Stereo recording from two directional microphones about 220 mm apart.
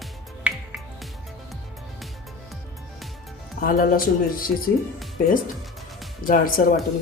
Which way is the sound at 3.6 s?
40° left (ahead or behind).